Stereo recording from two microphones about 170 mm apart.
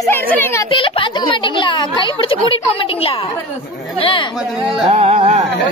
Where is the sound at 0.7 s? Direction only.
30° left (ahead or behind).